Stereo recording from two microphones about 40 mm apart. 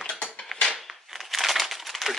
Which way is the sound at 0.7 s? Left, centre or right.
Centre.